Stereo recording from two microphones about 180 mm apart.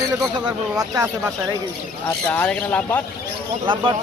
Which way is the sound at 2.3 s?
10° left (ahead or behind).